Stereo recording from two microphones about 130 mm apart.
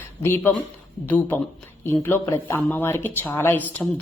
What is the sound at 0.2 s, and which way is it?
Speech, 20° left (ahead or behind).